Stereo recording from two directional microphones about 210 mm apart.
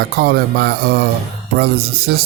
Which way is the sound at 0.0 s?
50° right (ahead or behind).